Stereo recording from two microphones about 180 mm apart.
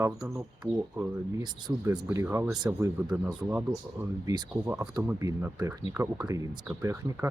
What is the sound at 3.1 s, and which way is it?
Speech, 5° right (ahead or behind).